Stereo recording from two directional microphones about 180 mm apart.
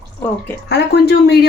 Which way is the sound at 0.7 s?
65° left (ahead or behind).